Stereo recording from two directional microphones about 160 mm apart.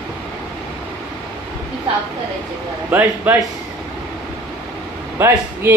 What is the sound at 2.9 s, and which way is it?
Speech, 15° right (ahead or behind).